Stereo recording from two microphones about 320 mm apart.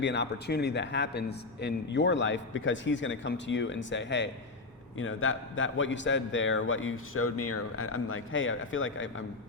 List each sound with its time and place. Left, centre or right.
0.0 s a man's voice: left